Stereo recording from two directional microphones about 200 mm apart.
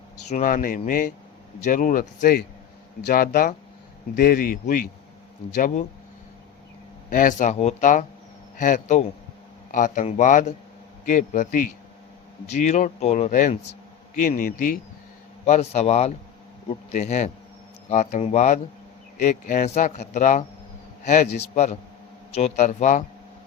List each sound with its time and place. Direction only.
0.3 s a man's voice: 40° left (ahead or behind)
7.1 s a man's voice: 40° left (ahead or behind)